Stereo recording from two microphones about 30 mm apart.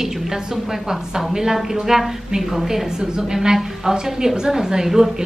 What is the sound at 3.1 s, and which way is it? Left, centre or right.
A woman's voice, right.